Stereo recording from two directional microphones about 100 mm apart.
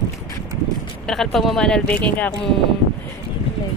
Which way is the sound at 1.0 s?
5° left (ahead or behind).